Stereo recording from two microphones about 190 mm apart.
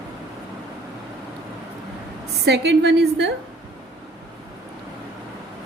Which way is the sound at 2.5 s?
60° right (ahead or behind).